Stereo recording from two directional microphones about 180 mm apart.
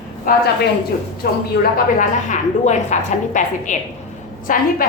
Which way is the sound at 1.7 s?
45° left (ahead or behind).